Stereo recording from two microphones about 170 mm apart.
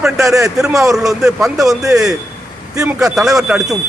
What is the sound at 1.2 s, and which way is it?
Speech, centre (ahead or behind).